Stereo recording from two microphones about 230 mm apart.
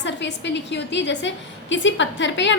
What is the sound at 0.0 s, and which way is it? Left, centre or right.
A woman's voice, left.